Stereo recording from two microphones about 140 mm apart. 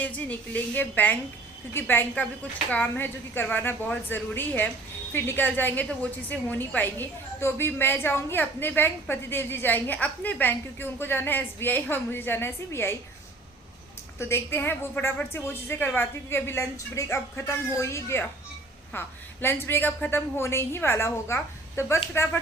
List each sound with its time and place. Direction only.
0.0 s a woman's voice: 10° left (ahead or behind)
14.2 s a woman's voice: 15° left (ahead or behind)